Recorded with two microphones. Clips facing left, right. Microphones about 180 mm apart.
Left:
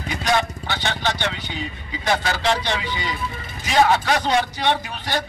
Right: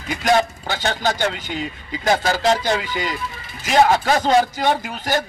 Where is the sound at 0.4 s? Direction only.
40° right (ahead or behind).